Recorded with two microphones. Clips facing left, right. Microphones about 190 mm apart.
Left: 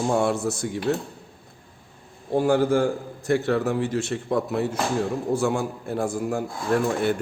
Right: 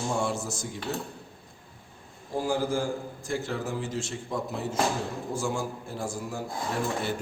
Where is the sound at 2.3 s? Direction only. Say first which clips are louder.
Left 8 dB; 65° left (ahead or behind).